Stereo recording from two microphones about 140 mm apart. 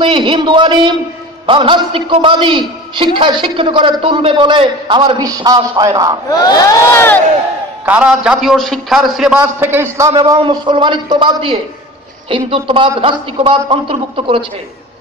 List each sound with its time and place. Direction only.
0.0 s a man's voice: 35° right (ahead or behind)
6.3 s crowd: 30° left (ahead or behind)
7.8 s a man's voice: 10° right (ahead or behind)
10.1 s a man's voice: 30° right (ahead or behind)